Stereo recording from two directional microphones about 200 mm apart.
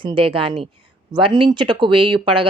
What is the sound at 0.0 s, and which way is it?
Speech, 25° right (ahead or behind).